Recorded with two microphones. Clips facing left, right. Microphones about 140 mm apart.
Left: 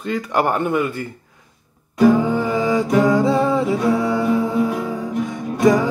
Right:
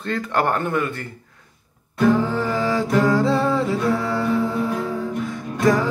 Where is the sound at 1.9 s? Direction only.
10° left (ahead or behind).